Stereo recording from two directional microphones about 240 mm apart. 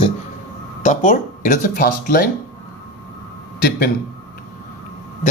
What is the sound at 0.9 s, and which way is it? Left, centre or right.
Speech, left.